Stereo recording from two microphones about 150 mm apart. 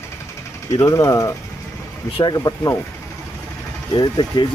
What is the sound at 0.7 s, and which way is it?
Speech, 20° left (ahead or behind).